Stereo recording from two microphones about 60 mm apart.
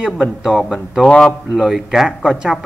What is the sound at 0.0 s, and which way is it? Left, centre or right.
Speech, centre.